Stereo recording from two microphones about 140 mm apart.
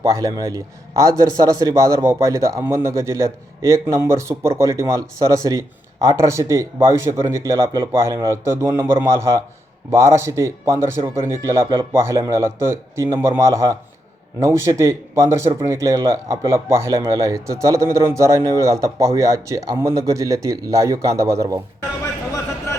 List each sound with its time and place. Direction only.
0.0 s a man's voice: 25° right (ahead or behind)